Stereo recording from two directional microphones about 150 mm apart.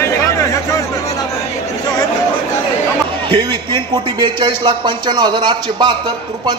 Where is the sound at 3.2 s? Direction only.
30° right (ahead or behind).